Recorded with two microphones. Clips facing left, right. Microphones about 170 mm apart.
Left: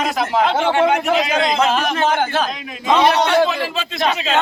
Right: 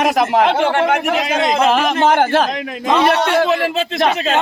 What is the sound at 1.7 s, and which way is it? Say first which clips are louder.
Speech: right 4 dB; 75° right (ahead or behind).